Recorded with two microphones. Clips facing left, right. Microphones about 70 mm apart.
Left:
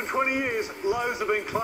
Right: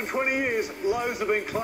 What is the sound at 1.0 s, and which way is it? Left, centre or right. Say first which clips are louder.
Speech: even; centre.